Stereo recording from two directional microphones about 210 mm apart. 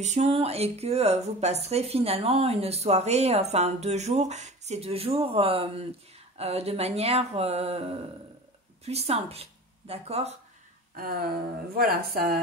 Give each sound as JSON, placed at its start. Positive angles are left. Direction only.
{"t": 0.0, "sound": "a woman's voice", "side_deg": -30}
{"t": 11.0, "sound": "speech", "side_deg": -45}